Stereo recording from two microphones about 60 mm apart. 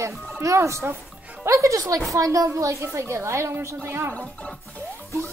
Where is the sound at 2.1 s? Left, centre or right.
Right.